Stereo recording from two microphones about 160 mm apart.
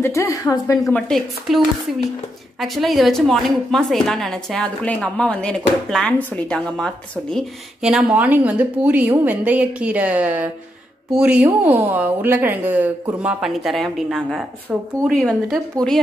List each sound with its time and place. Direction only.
0.0 s a woman's voice: 20° left (ahead or behind)
0.8 s a woman's voice: 5° left (ahead or behind)
2.6 s a woman's voice: centre (ahead or behind)